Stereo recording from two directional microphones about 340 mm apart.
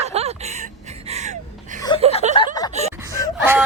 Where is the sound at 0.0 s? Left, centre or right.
Centre.